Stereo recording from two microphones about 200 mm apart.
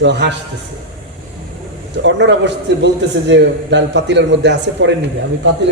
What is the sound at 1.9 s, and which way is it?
A man's voice, 65° right (ahead or behind).